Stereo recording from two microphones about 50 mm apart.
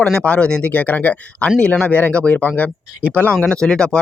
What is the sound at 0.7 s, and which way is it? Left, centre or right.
Speech, left.